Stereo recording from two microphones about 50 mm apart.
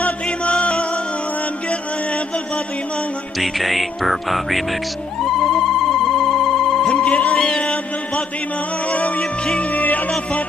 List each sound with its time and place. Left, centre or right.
0.0 s music: left
3.3 s music: centre
5.2 s telephone: centre
6.8 s telephone bell ringing: left
7.4 s music: centre
9.2 s music: centre
9.7 s music: left